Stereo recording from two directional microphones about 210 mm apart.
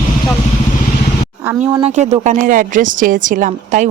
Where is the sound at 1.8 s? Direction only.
35° right (ahead or behind).